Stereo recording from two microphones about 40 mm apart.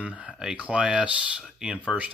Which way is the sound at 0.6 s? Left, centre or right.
Right.